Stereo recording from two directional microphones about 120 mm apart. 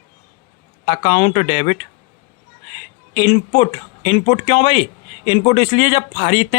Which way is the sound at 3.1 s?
45° left (ahead or behind).